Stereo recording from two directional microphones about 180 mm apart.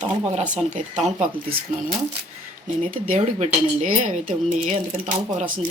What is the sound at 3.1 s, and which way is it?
A woman's voice, 40° right (ahead or behind).